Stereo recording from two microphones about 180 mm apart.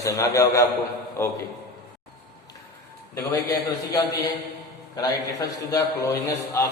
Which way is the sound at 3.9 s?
20° left (ahead or behind).